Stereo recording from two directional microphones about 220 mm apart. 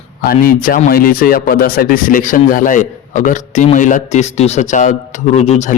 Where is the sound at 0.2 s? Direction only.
40° left (ahead or behind).